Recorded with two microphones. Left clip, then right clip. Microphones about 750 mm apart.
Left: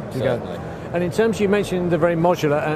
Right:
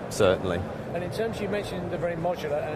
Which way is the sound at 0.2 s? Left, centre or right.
Right.